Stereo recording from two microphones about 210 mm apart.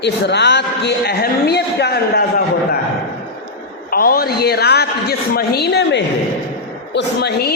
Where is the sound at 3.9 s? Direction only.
45° left (ahead or behind).